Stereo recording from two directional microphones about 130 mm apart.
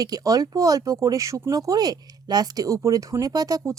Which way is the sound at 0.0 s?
30° right (ahead or behind).